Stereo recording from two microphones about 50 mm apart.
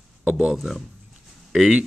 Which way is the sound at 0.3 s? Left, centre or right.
Centre.